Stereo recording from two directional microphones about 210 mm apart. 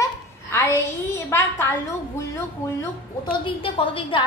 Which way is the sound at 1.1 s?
10° left (ahead or behind).